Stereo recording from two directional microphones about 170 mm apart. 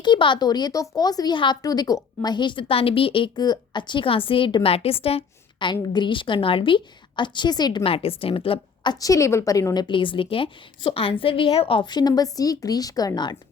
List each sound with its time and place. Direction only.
0.0 s speech: 30° left (ahead or behind)